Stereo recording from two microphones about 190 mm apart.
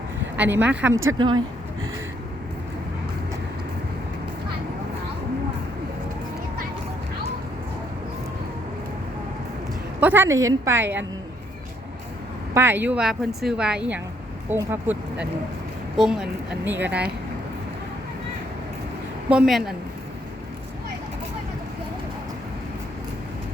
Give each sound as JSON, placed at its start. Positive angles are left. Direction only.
{"t": 0.3, "sound": "a woman's voice", "side_deg": -10}
{"t": 1.2, "sound": "speech", "side_deg": -25}
{"t": 10.0, "sound": "a woman's voice", "side_deg": -10}
{"t": 12.5, "sound": "a woman's voice", "side_deg": -10}
{"t": 19.3, "sound": "a woman's voice", "side_deg": -5}